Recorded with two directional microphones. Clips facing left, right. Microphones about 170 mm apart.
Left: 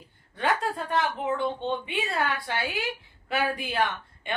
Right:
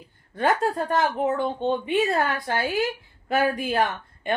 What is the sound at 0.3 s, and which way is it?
A woman's voice, 45° right (ahead or behind).